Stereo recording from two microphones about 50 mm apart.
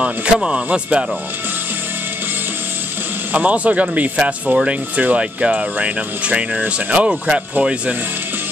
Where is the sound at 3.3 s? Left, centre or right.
Right.